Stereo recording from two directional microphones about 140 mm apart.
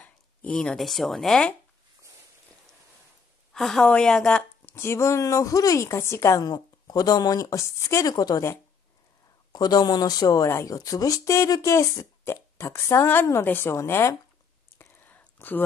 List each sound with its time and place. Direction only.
0.0 s speech: 10° left (ahead or behind)
3.5 s a woman's voice: 5° left (ahead or behind); by 14.1 s 20° left (ahead or behind)
14.8 s a sound: 15° left (ahead or behind)